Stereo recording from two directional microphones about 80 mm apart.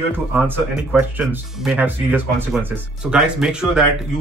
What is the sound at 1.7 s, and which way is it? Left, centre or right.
Speech, right.